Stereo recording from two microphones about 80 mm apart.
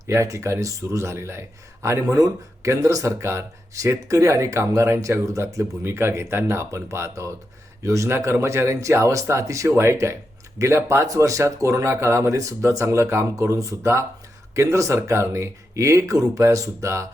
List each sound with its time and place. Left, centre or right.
0.1 s speech: right